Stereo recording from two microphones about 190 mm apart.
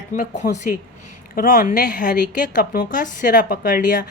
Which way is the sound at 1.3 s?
50° left (ahead or behind).